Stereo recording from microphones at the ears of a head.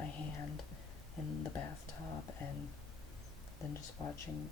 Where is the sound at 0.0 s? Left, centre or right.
Left.